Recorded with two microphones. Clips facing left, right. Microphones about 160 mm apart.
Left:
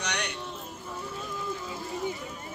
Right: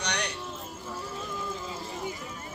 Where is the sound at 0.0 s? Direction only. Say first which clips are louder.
Right 1 dB; 35° right (ahead or behind).